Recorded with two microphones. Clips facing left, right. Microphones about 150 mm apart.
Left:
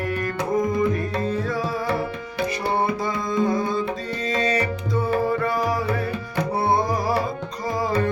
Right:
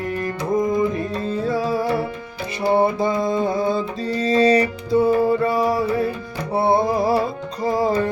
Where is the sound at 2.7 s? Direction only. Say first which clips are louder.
Right 9 dB; 25° right (ahead or behind).